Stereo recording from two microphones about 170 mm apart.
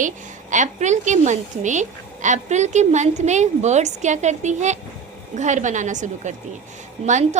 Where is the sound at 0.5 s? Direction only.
45° right (ahead or behind).